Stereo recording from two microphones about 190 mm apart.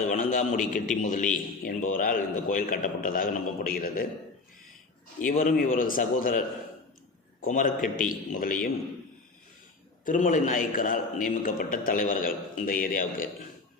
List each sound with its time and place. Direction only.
0.1 s a man's voice: 40° left (ahead or behind)
5.2 s a man's voice: 45° left (ahead or behind)
7.4 s a man's voice: 40° left (ahead or behind)
10.1 s a man's voice: 40° left (ahead or behind)